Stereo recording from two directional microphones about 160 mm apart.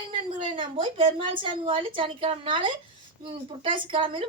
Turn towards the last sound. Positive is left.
turn(degrees=-35)  # may be behind; listen again after turning